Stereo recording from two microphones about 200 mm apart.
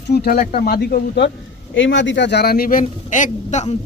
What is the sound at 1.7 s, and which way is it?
A man's voice, 65° left (ahead or behind).